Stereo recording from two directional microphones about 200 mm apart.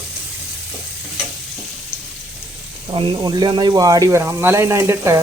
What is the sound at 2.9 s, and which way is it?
Speech, 25° right (ahead or behind).